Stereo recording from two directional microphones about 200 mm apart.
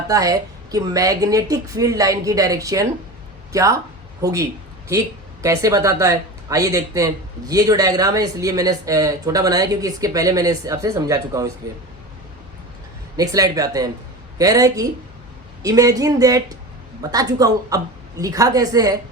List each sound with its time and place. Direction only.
0.1 s speech: 15° right (ahead or behind)
13.1 s speech: 15° right (ahead or behind)